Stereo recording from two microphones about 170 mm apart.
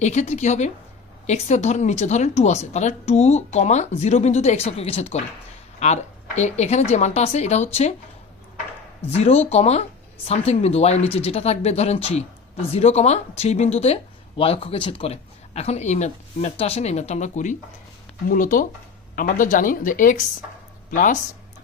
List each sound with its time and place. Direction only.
0.0 s a woman's voice: 40° left (ahead or behind)
9.0 s a woman's voice: 35° left (ahead or behind)